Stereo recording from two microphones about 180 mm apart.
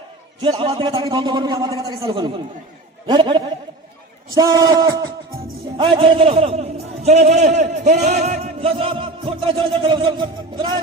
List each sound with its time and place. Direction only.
0.4 s a man's voice: 30° right (ahead or behind)
5.7 s a man's voice: 30° right (ahead or behind)